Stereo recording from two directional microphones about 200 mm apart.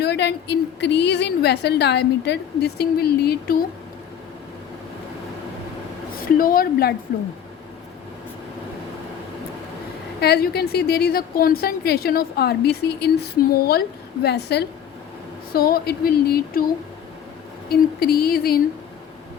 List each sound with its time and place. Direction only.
0.0 s a woman's voice: 55° left (ahead or behind)
6.1 s a woman's voice: 45° left (ahead or behind)
10.2 s a woman's voice: 55° left (ahead or behind)
17.7 s a woman's voice: 50° left (ahead or behind)